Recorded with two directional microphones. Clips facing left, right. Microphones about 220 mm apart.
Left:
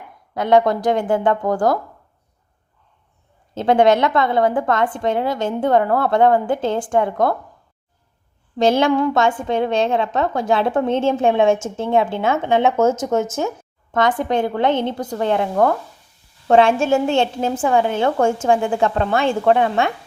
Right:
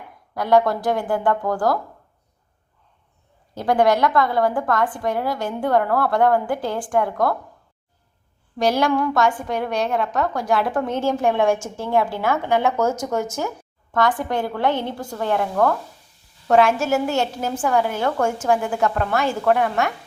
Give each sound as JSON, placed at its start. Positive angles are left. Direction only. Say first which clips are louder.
{"t": 0.3, "sound": "a woman's voice", "louder": "left 2 dB", "side_deg": 20}
{"t": 3.5, "sound": "a woman's voice", "louder": "left 4 dB", "side_deg": 25}
{"t": 8.5, "sound": "a woman's voice", "louder": "left 4 dB", "side_deg": 25}